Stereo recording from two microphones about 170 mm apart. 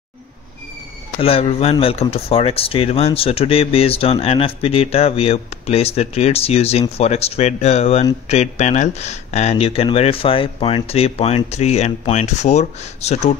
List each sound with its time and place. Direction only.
1.2 s speech: 35° left (ahead or behind)